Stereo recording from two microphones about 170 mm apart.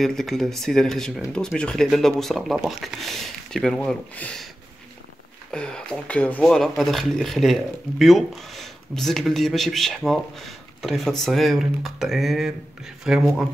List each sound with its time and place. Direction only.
0.0 s speech: centre (ahead or behind)
5.5 s speech: 5° left (ahead or behind)